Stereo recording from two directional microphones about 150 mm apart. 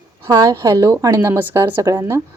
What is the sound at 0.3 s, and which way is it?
A woman's voice, 25° right (ahead or behind).